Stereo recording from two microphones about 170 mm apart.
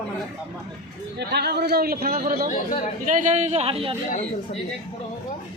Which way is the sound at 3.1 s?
45° right (ahead or behind).